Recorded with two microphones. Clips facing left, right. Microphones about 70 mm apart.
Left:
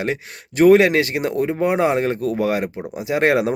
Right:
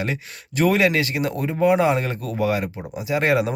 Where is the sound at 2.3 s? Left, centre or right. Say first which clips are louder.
Left 2 dB; left.